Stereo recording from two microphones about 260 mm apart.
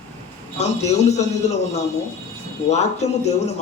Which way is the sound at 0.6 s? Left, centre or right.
Left.